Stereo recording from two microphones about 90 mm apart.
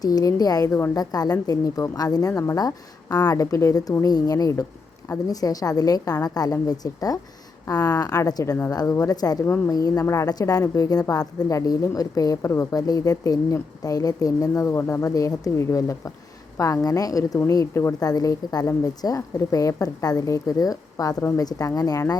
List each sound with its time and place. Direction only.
0.0 s a woman's voice: 45° left (ahead or behind)
14.7 s a woman's voice: 30° left (ahead or behind)